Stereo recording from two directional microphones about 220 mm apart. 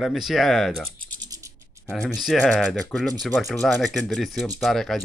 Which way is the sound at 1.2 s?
15° right (ahead or behind).